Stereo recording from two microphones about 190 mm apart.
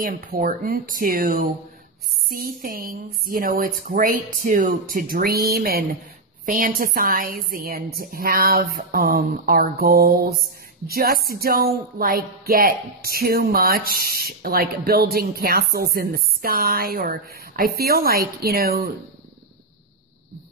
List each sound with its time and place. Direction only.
0.0 s speech: 45° right (ahead or behind)